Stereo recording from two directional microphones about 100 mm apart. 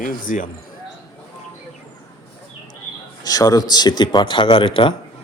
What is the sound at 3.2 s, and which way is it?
Speech, 40° left (ahead or behind).